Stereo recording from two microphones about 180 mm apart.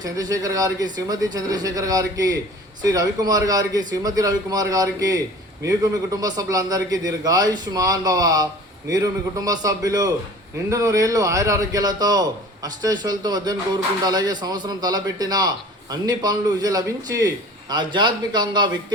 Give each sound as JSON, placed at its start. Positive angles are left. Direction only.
{"t": 0.0, "sound": "a man's voice", "side_deg": -20}